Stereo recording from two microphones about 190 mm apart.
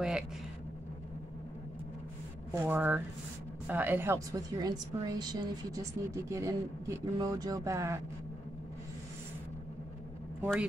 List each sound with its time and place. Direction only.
2.5 s a woman's voice: 10° right (ahead or behind)
10.4 s speech: 5° right (ahead or behind)